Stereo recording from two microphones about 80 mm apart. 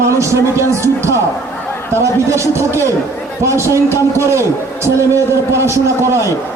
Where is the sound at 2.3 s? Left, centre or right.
Right.